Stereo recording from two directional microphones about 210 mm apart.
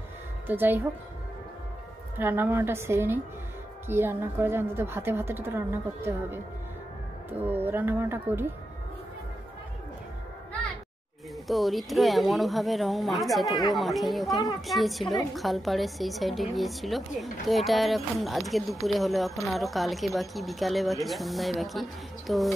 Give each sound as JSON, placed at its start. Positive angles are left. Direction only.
{"t": 0.5, "sound": "a woman's voice", "side_deg": -10}
{"t": 2.1, "sound": "a woman's voice", "side_deg": -10}
{"t": 11.4, "sound": "speech", "side_deg": 0}